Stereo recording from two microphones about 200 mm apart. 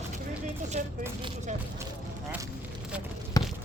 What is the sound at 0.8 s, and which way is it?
Speech, 35° right (ahead or behind).